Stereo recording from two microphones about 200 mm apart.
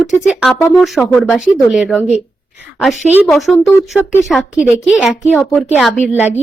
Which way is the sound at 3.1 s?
Centre (ahead or behind).